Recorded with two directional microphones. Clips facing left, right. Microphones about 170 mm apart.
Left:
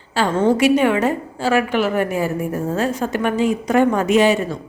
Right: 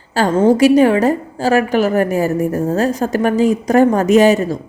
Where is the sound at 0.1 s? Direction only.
40° right (ahead or behind).